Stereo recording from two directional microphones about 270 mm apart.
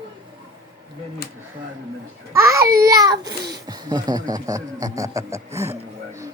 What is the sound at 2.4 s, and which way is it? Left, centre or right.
Speech, centre.